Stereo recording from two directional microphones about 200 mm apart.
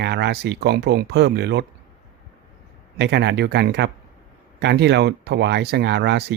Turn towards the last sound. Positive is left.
turn(degrees=-55)  # may be behind; listen again after turning